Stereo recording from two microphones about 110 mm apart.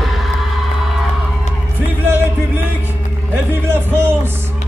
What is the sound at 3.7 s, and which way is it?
Music, 20° right (ahead or behind).